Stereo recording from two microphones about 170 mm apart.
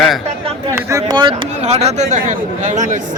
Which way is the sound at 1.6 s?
40° right (ahead or behind).